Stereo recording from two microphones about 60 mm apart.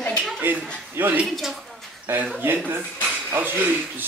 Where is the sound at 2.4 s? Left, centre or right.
Right.